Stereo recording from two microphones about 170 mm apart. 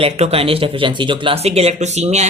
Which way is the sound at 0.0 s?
35° right (ahead or behind).